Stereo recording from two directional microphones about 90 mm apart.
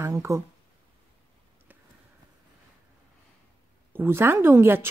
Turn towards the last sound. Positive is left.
turn(degrees=-25)  # may be behind; listen again after turning